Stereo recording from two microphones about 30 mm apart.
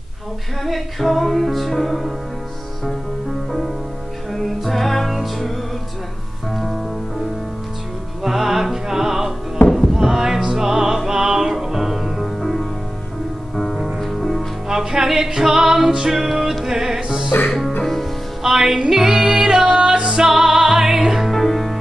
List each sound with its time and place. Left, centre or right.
0.7 s music: centre
4.3 s music: centre
6.5 s music: centre
8.2 s music: centre
12.4 s music: centre
14.0 s music: centre
14.7 s music: centre
17.5 s music: centre
18.4 s music: centre
21.3 s music: centre